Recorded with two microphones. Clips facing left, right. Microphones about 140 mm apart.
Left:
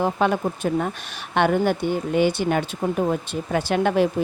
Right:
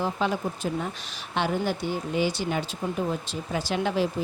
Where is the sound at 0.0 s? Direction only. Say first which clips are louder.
Left 6 dB; 60° left (ahead or behind).